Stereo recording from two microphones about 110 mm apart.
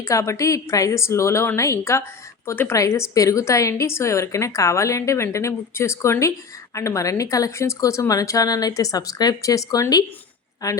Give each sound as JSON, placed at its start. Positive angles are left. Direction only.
{"t": 0.0, "sound": "a woman's voice", "side_deg": 30}